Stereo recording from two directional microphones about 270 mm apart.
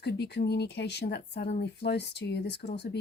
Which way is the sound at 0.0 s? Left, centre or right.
Left.